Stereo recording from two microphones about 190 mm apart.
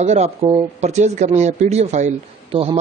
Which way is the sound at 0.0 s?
35° right (ahead or behind).